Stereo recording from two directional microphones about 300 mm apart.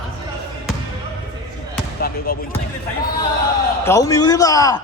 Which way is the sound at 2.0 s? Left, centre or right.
Left.